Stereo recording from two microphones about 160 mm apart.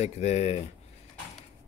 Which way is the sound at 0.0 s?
40° left (ahead or behind).